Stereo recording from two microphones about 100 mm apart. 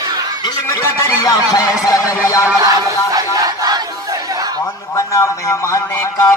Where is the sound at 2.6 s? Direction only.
35° right (ahead or behind).